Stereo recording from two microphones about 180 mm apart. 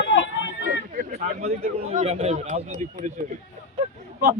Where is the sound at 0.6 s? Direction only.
55° right (ahead or behind).